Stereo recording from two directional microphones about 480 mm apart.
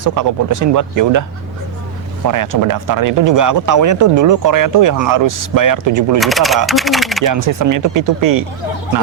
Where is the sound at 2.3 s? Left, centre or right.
Right.